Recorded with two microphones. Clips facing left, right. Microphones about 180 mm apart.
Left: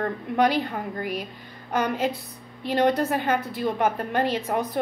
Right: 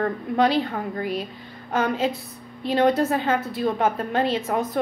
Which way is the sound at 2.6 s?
15° left (ahead or behind).